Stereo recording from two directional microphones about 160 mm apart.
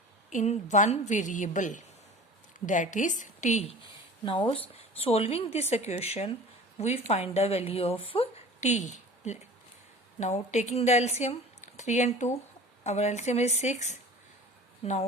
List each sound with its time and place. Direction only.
0.3 s a woman's voice: 50° left (ahead or behind)
4.3 s a woman's voice: 35° left (ahead or behind)